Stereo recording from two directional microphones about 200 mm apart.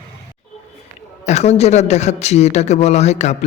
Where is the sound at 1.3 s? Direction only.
35° left (ahead or behind).